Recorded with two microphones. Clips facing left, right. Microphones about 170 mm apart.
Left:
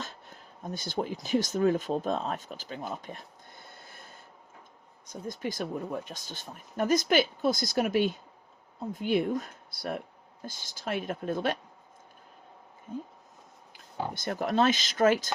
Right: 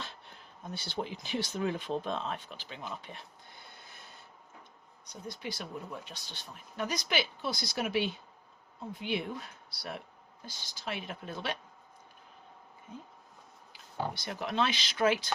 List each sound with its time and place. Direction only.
0.0 s speech: 45° left (ahead or behind)
5.3 s speech: 45° left (ahead or behind)
14.1 s speech: 50° left (ahead or behind)